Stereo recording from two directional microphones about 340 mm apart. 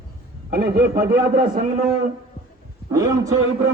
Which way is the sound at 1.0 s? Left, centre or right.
Right.